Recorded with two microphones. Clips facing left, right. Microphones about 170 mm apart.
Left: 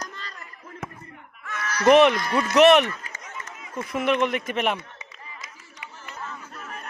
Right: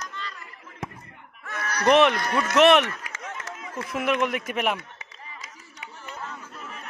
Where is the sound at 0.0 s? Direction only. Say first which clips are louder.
Even; 40° left (ahead or behind).